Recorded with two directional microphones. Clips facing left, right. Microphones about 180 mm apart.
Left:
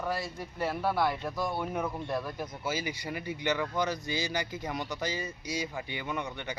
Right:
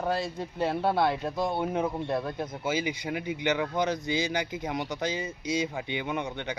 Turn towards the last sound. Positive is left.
turn(degrees=-20)  # may be behind; listen again after turning